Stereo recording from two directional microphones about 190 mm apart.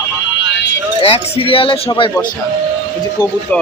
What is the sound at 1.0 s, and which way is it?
Speech, 30° left (ahead or behind).